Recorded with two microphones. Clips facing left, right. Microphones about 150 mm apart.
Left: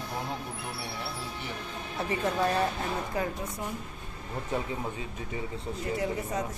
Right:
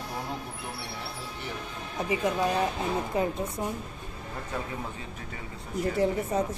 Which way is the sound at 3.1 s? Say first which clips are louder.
Right 4 dB; 20° right (ahead or behind).